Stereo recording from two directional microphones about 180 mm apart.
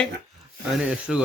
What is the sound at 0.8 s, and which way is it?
Speech, 5° right (ahead or behind).